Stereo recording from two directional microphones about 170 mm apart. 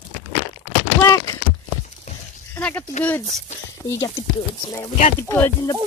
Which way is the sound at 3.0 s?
10° left (ahead or behind).